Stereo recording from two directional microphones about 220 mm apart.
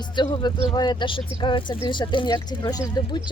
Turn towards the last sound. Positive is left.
turn(degrees=20)  # may be behind; listen again after turning